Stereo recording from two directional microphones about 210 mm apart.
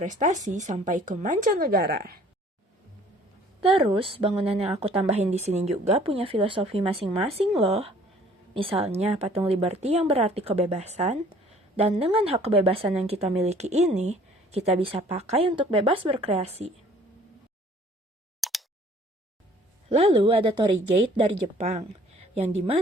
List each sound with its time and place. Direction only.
0.0 s speech: 35° right (ahead or behind)
3.6 s a woman's voice: 25° right (ahead or behind)
18.3 s a sound: centre (ahead or behind)
19.9 s a woman's voice: 25° right (ahead or behind)